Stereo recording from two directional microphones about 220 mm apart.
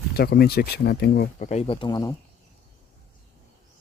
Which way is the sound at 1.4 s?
30° left (ahead or behind).